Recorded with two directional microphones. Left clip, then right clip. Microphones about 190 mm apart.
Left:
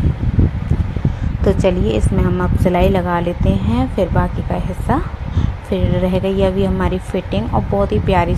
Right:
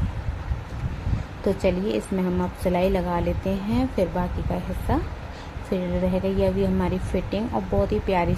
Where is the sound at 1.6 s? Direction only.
15° left (ahead or behind).